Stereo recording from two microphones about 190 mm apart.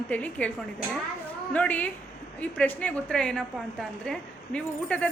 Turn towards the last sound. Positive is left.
turn(degrees=5)  # may be behind; listen again after turning